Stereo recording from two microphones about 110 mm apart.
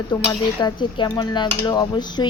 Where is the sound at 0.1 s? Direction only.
35° left (ahead or behind).